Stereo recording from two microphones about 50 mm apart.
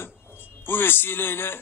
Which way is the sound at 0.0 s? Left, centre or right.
Left.